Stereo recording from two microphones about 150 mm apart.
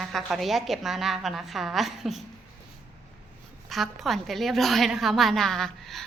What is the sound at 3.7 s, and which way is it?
A woman's voice, centre (ahead or behind).